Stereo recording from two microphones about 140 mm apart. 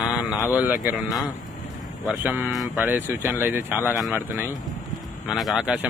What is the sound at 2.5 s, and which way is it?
Speech, centre (ahead or behind).